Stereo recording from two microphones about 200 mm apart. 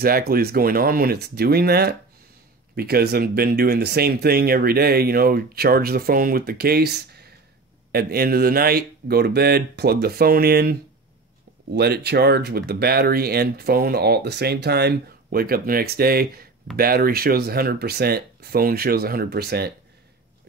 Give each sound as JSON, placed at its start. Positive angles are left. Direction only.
{"t": 0.0, "sound": "speech", "side_deg": -50}